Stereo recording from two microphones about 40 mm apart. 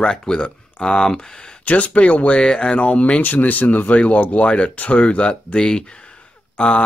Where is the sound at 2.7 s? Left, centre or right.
Left.